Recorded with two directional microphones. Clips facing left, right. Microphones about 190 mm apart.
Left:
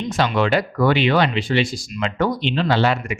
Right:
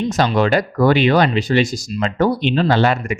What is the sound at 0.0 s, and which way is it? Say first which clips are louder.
Speech: right 3 dB; 35° right (ahead or behind).